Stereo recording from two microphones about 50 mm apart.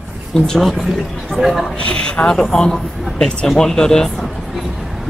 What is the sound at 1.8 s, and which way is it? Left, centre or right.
Speech, centre.